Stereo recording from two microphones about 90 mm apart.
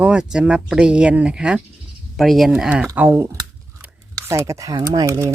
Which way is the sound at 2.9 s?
25° right (ahead or behind).